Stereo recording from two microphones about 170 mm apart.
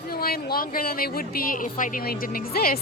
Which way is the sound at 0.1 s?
60° left (ahead or behind).